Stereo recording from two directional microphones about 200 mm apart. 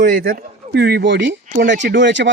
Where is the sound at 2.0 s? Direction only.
60° right (ahead or behind).